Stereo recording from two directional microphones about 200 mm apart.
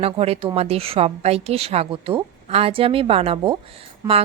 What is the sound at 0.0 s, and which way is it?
A woman's voice, 30° right (ahead or behind).